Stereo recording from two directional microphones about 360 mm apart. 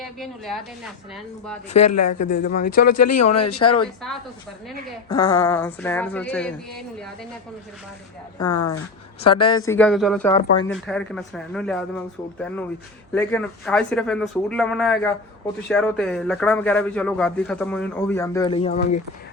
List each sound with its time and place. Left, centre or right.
0.0 s a man's voice: centre
1.8 s speech: left
2.0 s speech: left
2.9 s speech: left
5.0 s a man's voice: centre
9.2 s a woman's voice: left
9.5 s a man's voice: centre